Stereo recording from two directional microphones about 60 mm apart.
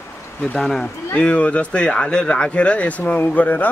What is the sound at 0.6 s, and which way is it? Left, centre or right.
Speech, centre.